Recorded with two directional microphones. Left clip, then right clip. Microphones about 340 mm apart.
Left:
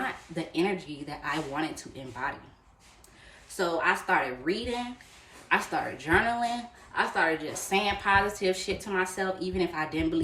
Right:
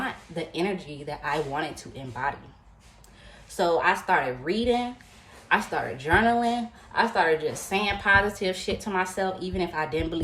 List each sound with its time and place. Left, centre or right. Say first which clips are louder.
0.3 s a woman's voice: even; centre
3.6 s a woman's voice: right 4 dB; centre